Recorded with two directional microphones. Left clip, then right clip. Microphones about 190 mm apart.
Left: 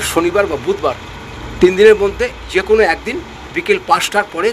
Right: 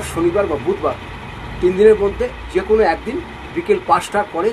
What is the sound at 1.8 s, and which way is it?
Speech, 65° left (ahead or behind).